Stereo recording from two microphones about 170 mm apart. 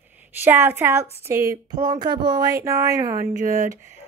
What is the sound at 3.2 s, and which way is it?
Speech, 55° right (ahead or behind).